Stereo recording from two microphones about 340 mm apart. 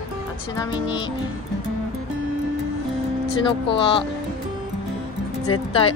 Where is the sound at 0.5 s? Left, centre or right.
Centre.